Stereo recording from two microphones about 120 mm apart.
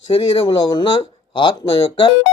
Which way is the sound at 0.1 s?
45° left (ahead or behind).